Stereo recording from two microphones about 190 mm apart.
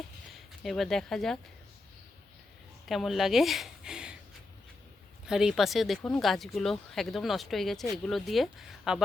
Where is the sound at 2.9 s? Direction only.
Centre (ahead or behind).